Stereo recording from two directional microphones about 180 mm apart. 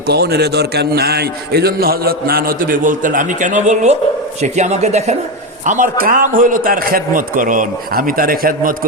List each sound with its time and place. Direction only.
0.1 s a man's voice: 65° right (ahead or behind)